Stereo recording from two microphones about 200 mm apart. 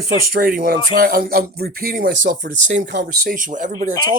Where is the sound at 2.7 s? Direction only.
60° right (ahead or behind).